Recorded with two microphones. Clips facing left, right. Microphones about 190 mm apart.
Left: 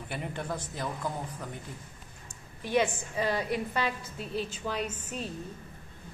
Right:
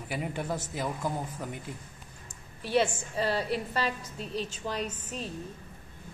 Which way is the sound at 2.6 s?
15° left (ahead or behind).